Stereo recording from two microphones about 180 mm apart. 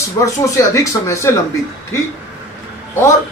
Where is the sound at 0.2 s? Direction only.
15° left (ahead or behind).